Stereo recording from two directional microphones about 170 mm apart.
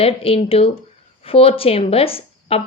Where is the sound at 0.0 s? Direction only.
35° left (ahead or behind).